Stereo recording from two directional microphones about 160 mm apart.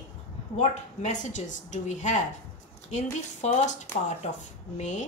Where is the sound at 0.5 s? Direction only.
45° left (ahead or behind).